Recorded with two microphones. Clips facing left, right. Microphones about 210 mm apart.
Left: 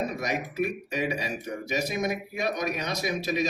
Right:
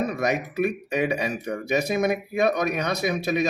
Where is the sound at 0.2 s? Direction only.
60° right (ahead or behind).